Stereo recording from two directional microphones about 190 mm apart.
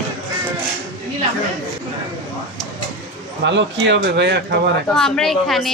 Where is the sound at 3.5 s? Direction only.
65° right (ahead or behind).